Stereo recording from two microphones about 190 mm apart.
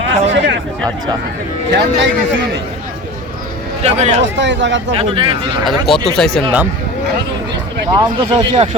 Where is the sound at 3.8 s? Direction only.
35° right (ahead or behind).